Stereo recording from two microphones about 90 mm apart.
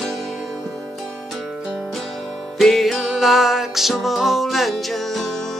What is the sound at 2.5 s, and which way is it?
Music, centre (ahead or behind).